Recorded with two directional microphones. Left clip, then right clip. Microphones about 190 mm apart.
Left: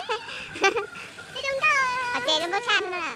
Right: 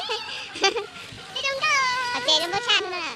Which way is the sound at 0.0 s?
5° left (ahead or behind).